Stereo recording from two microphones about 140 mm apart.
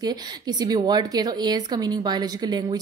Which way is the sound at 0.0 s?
30° right (ahead or behind).